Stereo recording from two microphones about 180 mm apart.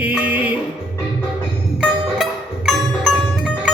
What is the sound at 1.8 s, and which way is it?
Music, centre (ahead or behind).